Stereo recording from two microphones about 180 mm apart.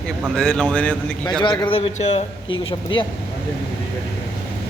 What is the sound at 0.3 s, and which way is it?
Speech, 5° left (ahead or behind).